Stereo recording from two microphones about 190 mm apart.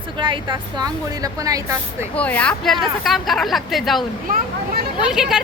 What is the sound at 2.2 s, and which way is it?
Speech, 5° left (ahead or behind).